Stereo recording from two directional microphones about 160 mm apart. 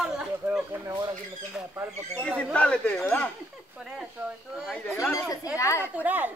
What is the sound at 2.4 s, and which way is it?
Speech, 5° left (ahead or behind).